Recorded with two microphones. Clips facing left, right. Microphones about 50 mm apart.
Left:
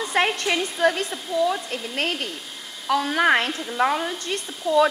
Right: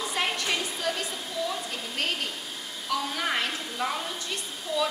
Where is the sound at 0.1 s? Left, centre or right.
Left.